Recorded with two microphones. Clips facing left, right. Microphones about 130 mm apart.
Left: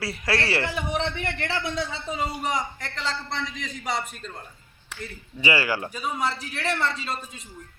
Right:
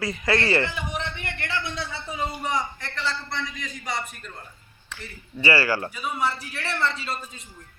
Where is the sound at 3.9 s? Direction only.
25° left (ahead or behind).